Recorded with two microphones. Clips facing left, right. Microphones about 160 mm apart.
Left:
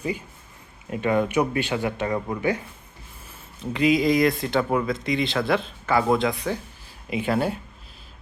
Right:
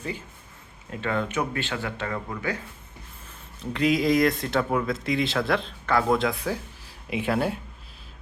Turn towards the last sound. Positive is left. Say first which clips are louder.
# left 2 dB
turn(degrees=0)  # may be behind; listen again after turning